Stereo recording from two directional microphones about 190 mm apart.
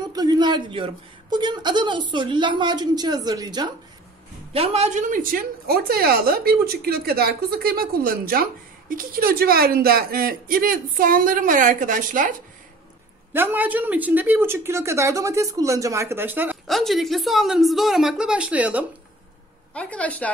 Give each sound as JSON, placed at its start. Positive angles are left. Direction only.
{"t": 0.1, "sound": "speech", "side_deg": -20}
{"t": 4.6, "sound": "a woman's voice", "side_deg": -35}
{"t": 13.3, "sound": "speech", "side_deg": -10}
{"t": 16.6, "sound": "speech", "side_deg": 0}
{"t": 19.7, "sound": "a woman's voice", "side_deg": 5}